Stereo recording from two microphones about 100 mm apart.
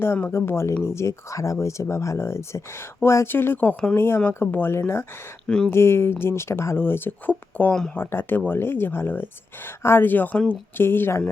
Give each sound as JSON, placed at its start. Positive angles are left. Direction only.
{"t": 0.0, "sound": "speech", "side_deg": 25}
{"t": 5.5, "sound": "speech", "side_deg": 5}
{"t": 5.7, "sound": "speech", "side_deg": 25}